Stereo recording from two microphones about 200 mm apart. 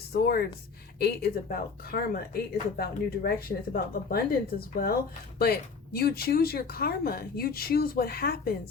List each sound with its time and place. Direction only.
0.1 s speech: 50° left (ahead or behind)
5.4 s speech: 50° left (ahead or behind)